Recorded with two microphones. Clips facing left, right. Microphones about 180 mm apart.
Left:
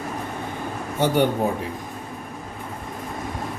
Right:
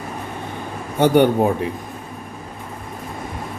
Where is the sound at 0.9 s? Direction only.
60° right (ahead or behind).